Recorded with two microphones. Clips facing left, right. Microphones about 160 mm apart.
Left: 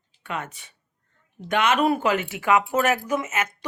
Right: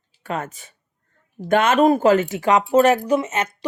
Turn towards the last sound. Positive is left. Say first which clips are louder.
# right 5 dB
turn(degrees=-35)  # may be behind; listen again after turning